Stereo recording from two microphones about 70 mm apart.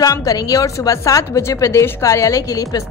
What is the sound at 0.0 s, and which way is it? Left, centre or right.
A woman's voice, left.